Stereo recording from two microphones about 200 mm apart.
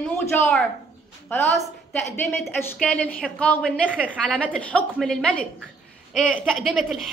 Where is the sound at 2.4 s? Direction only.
5° left (ahead or behind).